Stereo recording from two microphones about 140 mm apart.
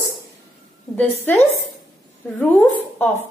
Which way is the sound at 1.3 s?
10° left (ahead or behind).